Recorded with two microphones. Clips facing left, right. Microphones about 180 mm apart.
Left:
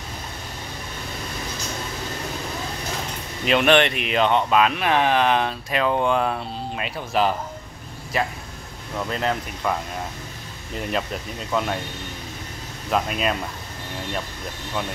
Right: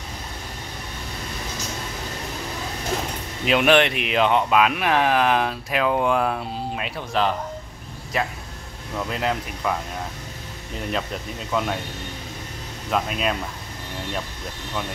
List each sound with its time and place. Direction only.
3.4 s speech: 5° right (ahead or behind)
11.5 s speech: centre (ahead or behind)
12.9 s speech: centre (ahead or behind)